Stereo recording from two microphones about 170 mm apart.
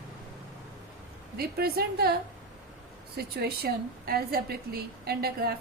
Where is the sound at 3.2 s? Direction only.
65° right (ahead or behind).